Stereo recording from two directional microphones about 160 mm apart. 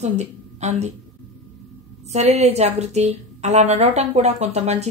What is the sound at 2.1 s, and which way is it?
A woman's voice, 45° right (ahead or behind).